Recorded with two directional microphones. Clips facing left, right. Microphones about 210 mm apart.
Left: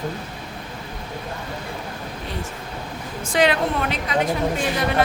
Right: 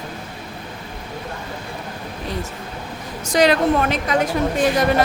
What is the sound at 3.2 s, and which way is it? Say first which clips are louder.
Speech: right 4 dB; 40° right (ahead or behind).